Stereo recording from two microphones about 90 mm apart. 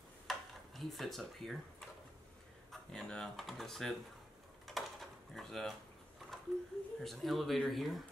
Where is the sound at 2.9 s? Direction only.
5° left (ahead or behind).